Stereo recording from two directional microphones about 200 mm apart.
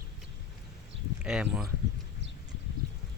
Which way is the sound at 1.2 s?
5° right (ahead or behind).